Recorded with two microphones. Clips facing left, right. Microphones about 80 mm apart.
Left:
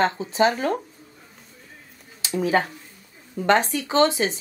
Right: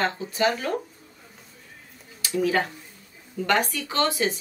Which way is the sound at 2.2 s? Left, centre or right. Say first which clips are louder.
Left 2 dB; left.